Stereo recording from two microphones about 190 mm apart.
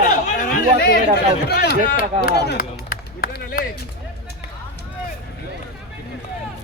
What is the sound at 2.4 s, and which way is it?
Run, 50° left (ahead or behind).